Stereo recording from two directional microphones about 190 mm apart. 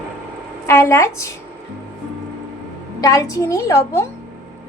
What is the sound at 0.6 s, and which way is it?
Speech, 15° left (ahead or behind).